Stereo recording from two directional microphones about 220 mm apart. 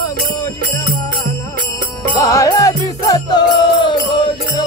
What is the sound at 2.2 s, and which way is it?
Music, 15° left (ahead or behind).